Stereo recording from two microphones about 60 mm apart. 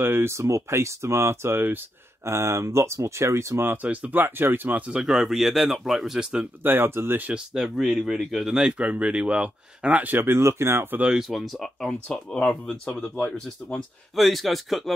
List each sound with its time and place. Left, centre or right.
0.0 s speech: right
3.6 s speech: right
4.1 s speech: right
5.0 s speech: centre
6.6 s speech: right
7.2 s speech: right
7.5 s speech: centre
8.5 s speech: centre
10.0 s speech: right
11.1 s a man's voice: centre
11.9 s speech: centre
14.1 s a man's voice: centre